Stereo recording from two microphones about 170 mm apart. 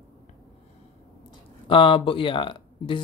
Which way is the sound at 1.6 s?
30° left (ahead or behind).